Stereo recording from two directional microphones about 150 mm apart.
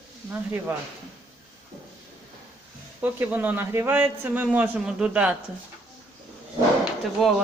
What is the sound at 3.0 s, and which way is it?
A man's voice, 15° right (ahead or behind).